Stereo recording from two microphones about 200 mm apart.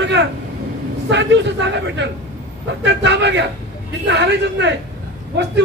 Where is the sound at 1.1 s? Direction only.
60° right (ahead or behind).